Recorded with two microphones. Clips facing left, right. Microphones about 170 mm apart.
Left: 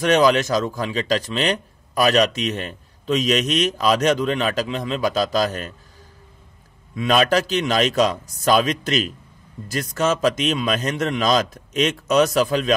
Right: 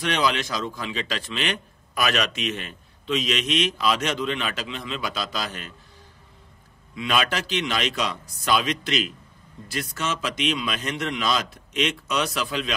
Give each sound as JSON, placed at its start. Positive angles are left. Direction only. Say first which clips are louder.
{"t": 0.0, "sound": "a man's voice", "louder": "left 8 dB", "side_deg": 45}
{"t": 7.0, "sound": "a man's voice", "louder": "left 7 dB", "side_deg": 45}